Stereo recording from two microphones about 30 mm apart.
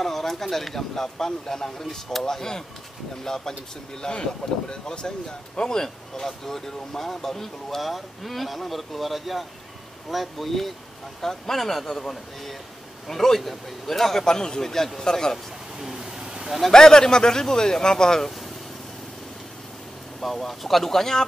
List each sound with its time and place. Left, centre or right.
0.0 s speech: centre
4.1 s speech: left
4.8 s speech: left
7.8 s speech: centre
13.1 s speech: centre
14.2 s speech: left
15.3 s a sound: centre
16.7 s speech: left
20.2 s speech: centre